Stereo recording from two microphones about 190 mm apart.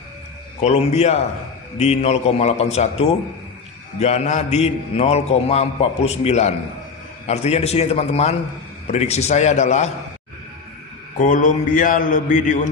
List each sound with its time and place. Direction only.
0.6 s a man's voice: 35° left (ahead or behind)
11.2 s a man's voice: 45° left (ahead or behind)